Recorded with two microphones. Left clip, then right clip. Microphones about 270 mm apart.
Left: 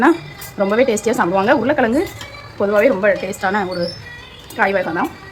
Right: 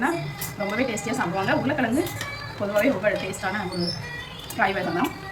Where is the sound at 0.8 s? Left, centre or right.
Centre.